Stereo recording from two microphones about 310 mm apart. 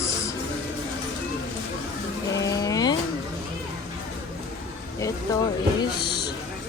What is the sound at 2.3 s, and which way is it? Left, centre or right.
Vehicle, centre.